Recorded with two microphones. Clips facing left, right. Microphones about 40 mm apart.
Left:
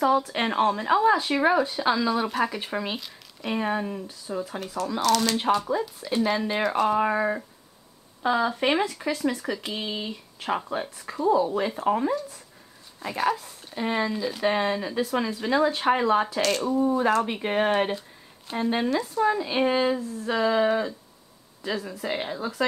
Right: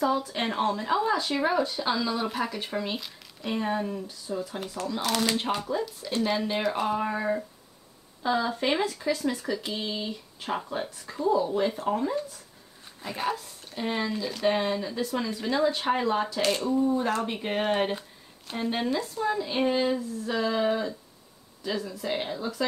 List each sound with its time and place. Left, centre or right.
0.2 s speech: left; by 4.6 s centre
5.0 s speech: centre
5.7 s speech: centre
7.0 s speech: left
8.2 s speech: left
9.7 s speech: left
13.4 s speech: centre
14.8 s speech: left
16.3 s speech: centre
16.7 s speech: centre
19.2 s speech: left